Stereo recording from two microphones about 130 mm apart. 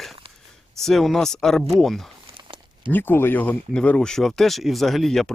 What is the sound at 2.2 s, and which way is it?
Crumpling, 40° right (ahead or behind).